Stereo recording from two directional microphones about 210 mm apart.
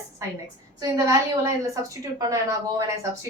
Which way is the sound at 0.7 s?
15° right (ahead or behind).